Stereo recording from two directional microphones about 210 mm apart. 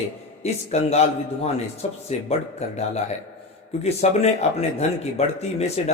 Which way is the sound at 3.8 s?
30° left (ahead or behind).